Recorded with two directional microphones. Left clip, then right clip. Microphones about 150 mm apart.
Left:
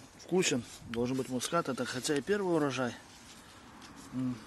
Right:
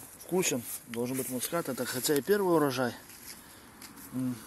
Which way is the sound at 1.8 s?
Centre (ahead or behind).